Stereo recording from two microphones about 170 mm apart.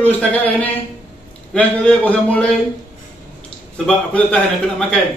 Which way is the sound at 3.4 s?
5° left (ahead or behind).